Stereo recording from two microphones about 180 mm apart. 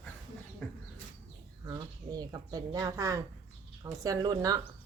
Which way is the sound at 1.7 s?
20° right (ahead or behind).